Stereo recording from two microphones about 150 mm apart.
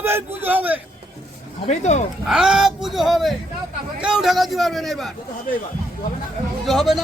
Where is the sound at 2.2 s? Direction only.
5° right (ahead or behind).